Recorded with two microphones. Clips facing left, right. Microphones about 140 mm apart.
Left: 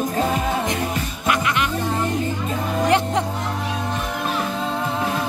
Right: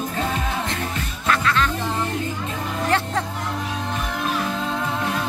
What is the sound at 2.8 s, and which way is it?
Music, 15° left (ahead or behind).